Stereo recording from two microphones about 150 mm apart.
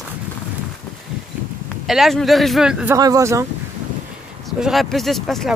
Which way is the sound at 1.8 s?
Centre (ahead or behind).